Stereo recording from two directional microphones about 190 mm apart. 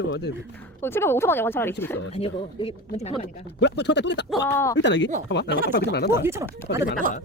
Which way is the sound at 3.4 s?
65° left (ahead or behind).